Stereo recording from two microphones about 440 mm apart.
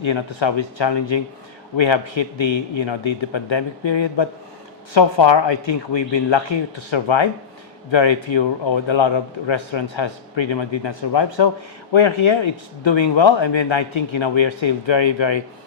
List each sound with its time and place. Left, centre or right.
0.0 s a man's voice: left
1.7 s a man's voice: left
11.9 s speech: left